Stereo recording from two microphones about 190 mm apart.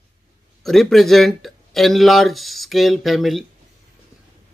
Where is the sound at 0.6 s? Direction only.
Centre (ahead or behind).